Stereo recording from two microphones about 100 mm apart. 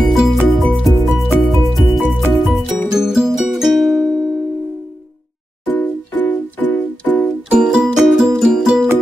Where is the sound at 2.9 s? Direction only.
5° right (ahead or behind).